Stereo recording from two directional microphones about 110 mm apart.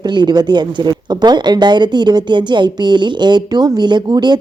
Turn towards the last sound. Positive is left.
turn(degrees=-40)  # may be behind; listen again after turning